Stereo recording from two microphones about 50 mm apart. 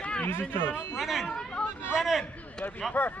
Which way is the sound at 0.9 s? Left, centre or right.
Centre.